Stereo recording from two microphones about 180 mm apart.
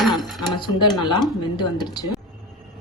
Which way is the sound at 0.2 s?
Centre (ahead or behind).